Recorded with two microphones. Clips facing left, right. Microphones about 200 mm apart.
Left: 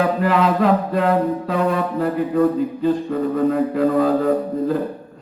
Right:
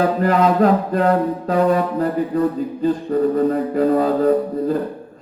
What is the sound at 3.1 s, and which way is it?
Mantra, 40° right (ahead or behind).